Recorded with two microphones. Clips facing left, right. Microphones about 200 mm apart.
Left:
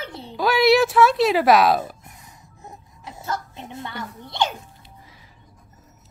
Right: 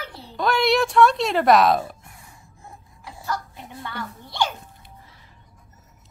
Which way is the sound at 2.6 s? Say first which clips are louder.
Left 3 dB; 20° left (ahead or behind).